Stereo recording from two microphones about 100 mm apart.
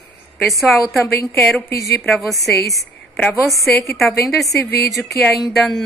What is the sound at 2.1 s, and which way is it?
A woman's voice, centre (ahead or behind).